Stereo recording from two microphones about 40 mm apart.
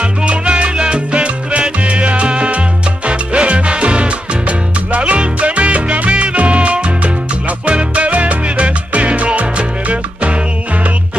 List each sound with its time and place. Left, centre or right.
0.0 s salsa music: right
3.1 s music: right